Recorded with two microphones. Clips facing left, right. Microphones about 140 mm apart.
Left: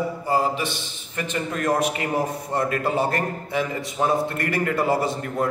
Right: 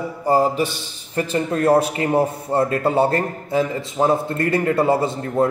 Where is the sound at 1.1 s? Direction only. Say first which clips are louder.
Right 6 dB; 35° right (ahead or behind).